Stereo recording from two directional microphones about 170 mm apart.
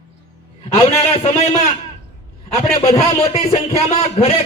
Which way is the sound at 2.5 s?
20° left (ahead or behind).